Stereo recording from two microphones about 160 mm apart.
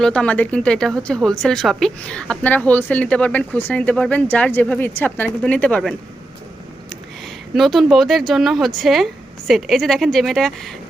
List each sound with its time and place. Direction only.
0.0 s speech: 5° left (ahead or behind)
7.5 s speech: centre (ahead or behind)